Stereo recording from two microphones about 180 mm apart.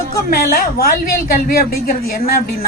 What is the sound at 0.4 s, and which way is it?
A woman's voice, 55° left (ahead or behind).